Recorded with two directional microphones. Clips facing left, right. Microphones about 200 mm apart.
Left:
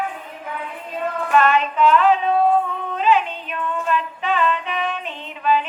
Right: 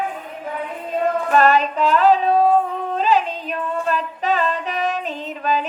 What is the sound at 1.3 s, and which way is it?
Female singing, 40° right (ahead or behind).